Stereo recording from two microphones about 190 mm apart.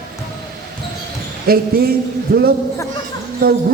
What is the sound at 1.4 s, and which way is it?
Speech, 50° right (ahead or behind).